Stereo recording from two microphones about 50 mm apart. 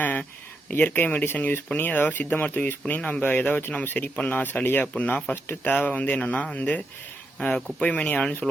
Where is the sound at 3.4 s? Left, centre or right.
Left.